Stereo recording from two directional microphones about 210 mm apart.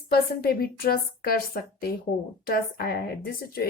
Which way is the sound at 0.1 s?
45° left (ahead or behind).